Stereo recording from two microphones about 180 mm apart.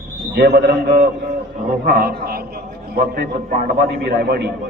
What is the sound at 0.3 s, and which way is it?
A man's voice, 65° right (ahead or behind).